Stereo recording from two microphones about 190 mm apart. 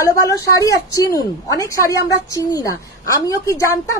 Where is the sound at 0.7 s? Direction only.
15° left (ahead or behind).